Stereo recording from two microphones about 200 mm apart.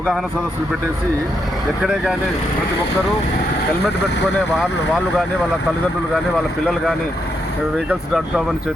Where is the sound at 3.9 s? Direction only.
60° left (ahead or behind).